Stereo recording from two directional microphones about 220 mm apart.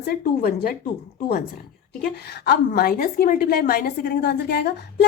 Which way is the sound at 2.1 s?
45° left (ahead or behind).